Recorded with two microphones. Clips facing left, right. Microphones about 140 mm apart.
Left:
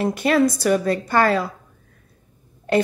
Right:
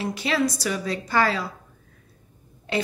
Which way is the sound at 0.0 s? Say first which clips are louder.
Left 6 dB; 50° left (ahead or behind).